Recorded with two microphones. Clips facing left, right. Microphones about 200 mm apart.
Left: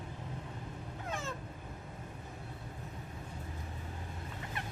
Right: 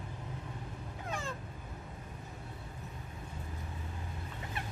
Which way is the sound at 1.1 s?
Centre (ahead or behind).